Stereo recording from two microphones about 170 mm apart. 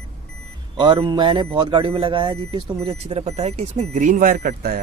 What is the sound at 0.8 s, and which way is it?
Speech, 30° right (ahead or behind).